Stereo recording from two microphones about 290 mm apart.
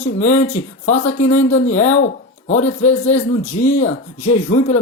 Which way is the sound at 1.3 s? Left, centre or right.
Left.